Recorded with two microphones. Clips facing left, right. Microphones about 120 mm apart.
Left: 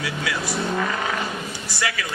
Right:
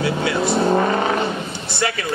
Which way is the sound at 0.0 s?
30° right (ahead or behind).